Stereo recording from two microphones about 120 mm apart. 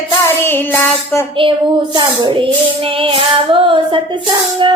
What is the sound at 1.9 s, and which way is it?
Female singing, 40° right (ahead or behind).